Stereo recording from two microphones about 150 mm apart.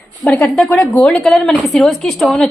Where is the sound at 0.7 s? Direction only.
20° left (ahead or behind).